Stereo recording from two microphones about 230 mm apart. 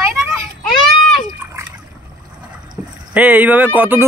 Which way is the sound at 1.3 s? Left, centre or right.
Centre.